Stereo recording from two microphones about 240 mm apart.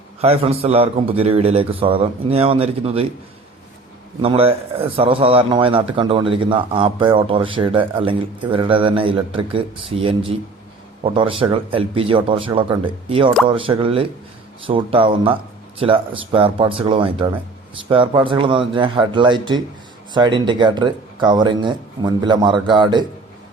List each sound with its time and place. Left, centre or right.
0.2 s speech: right
4.2 s speech: right